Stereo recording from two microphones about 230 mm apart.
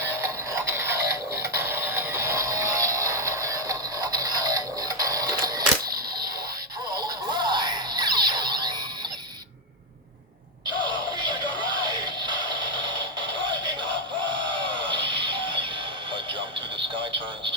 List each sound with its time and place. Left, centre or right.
0.0 s music: centre
5.8 s single-lens reflex camera: right
6.9 s a sound: centre
10.8 s synthetic singing: centre
12.0 s a sound: centre
13.4 s music: right